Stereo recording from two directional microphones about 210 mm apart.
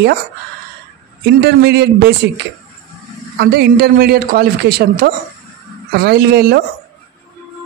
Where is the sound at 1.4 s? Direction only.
55° right (ahead or behind).